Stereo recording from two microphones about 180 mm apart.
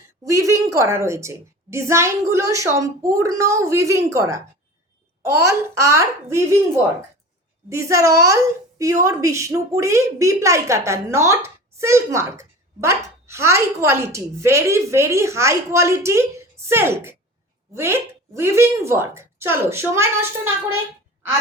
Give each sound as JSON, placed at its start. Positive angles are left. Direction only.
{"t": 0.3, "sound": "speech", "side_deg": -15}
{"t": 7.7, "sound": "speech", "side_deg": -15}